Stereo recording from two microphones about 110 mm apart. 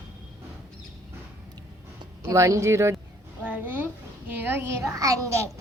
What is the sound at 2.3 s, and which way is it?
Speech, 25° right (ahead or behind).